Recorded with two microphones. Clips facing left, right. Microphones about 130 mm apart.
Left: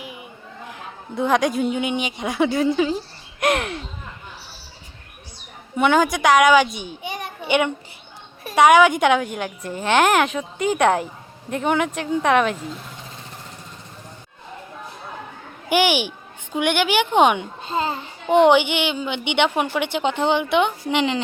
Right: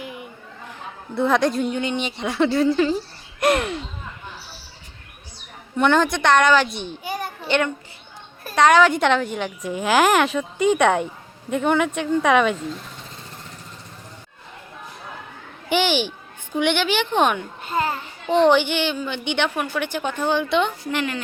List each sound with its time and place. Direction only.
0.7 s a woman's voice: centre (ahead or behind)
5.7 s speech: 10° left (ahead or behind)
7.4 s a child's voice: 10° left (ahead or behind)
15.7 s a woman's voice: 10° left (ahead or behind)